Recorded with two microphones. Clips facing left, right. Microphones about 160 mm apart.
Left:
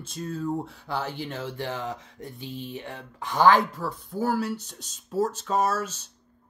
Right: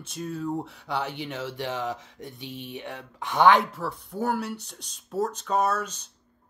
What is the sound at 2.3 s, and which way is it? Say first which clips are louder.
Speech: left 2 dB; 70° right (ahead or behind).